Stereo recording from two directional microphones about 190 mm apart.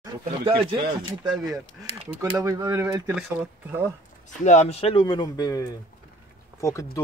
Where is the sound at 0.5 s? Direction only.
25° right (ahead or behind).